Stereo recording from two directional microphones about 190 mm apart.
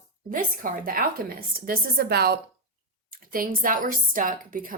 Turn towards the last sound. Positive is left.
turn(degrees=-45)  # may be behind; listen again after turning